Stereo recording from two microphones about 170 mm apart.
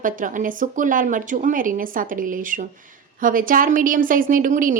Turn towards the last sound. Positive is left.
turn(degrees=-50)  # may be behind; listen again after turning